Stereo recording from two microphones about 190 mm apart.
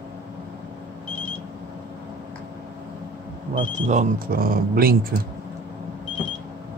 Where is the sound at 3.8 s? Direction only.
50° right (ahead or behind).